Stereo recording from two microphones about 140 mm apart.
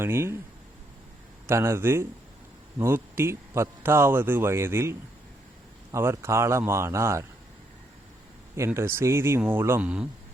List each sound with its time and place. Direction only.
0.0 s speech: 20° right (ahead or behind)
1.5 s a man's voice: 20° right (ahead or behind)
8.5 s speech: 20° right (ahead or behind)